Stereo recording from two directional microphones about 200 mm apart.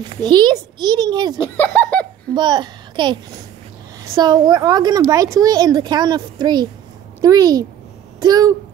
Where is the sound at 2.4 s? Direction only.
20° right (ahead or behind).